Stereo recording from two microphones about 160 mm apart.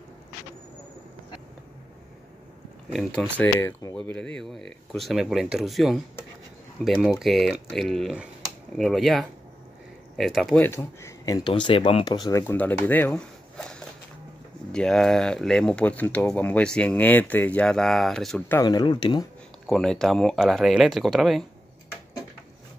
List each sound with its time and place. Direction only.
2.9 s speech: centre (ahead or behind)
3.5 s speech: 20° left (ahead or behind)
3.9 s speech: 5° left (ahead or behind)
7.0 s speech: centre (ahead or behind)
10.6 s speech: 15° left (ahead or behind)
18.6 s speech: 25° left (ahead or behind)
19.7 s speech: 5° left (ahead or behind)